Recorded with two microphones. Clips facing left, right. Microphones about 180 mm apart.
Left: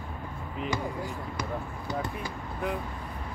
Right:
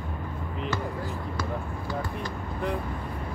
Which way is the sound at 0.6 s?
15° left (ahead or behind).